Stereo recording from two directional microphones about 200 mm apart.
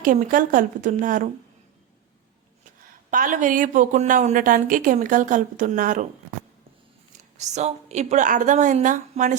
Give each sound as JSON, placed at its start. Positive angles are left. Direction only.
{"t": 0.0, "sound": "speech", "side_deg": -40}
{"t": 3.1, "sound": "speech", "side_deg": -40}
{"t": 7.3, "sound": "speech", "side_deg": -35}